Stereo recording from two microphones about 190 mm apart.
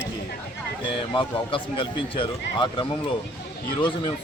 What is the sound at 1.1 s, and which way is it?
Speech, 25° left (ahead or behind).